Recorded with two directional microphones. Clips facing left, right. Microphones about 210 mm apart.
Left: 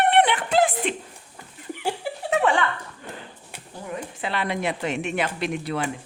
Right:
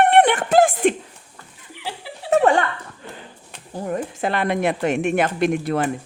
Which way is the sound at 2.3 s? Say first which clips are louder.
Right 6 dB; 40° right (ahead or behind).